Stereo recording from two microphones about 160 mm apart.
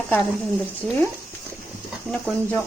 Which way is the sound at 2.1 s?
10° left (ahead or behind).